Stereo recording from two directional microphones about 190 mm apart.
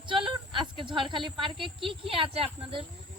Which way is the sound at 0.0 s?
25° right (ahead or behind).